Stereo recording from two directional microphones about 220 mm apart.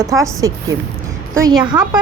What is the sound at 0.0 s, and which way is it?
Speech, 15° right (ahead or behind).